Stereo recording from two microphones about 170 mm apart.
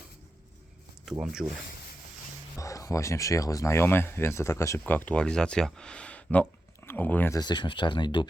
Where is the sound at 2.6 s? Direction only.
20° left (ahead or behind).